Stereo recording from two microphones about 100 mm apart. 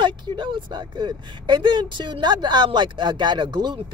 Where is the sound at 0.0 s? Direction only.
55° right (ahead or behind).